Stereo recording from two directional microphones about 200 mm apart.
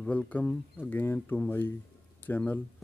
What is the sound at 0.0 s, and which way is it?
Speech, 5° left (ahead or behind).